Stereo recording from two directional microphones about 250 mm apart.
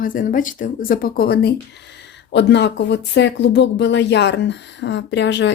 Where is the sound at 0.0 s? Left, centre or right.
Left.